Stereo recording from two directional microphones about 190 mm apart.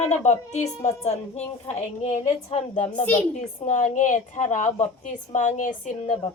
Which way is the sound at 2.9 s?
10° left (ahead or behind).